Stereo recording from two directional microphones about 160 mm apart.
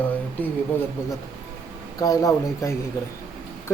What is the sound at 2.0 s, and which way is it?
Speech, 20° left (ahead or behind).